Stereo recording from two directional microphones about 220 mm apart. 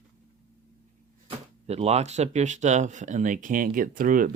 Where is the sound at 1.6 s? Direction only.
30° right (ahead or behind).